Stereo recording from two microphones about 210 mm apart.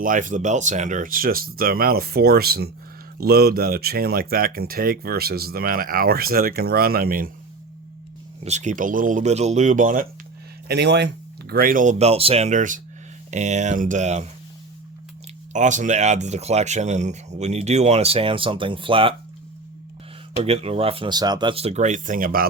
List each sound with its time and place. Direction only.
0.0 s speech: 40° right (ahead or behind)
8.4 s speech: 35° right (ahead or behind)
10.7 s speech: 55° right (ahead or behind); by 14.3 s 35° right (ahead or behind)
15.5 s speech: 35° right (ahead or behind)
20.4 s speech: 30° right (ahead or behind)